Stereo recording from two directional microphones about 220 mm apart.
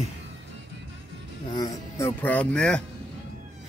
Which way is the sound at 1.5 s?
15° left (ahead or behind).